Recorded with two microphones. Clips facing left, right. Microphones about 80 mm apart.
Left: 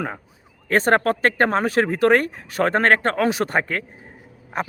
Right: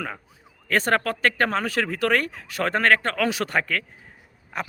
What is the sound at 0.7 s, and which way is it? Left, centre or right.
Speech, left.